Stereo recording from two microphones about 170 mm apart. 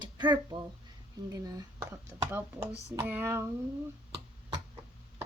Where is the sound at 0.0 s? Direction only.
25° right (ahead or behind).